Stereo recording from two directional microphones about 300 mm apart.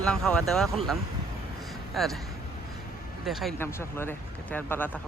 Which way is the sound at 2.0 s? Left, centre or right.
Centre.